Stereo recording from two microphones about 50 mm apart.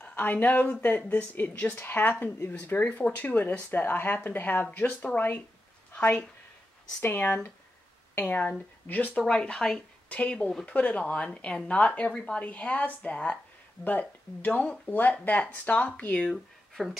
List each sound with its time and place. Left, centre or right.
0.1 s a woman's voice: left
7.0 s speech: left
8.1 s a sound: left
8.8 s speech: left
9.3 s a woman's voice: left
16.3 s speech: centre